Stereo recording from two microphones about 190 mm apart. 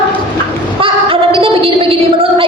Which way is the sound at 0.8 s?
30° right (ahead or behind).